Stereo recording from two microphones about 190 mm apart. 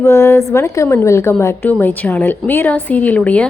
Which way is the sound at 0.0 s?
15° left (ahead or behind).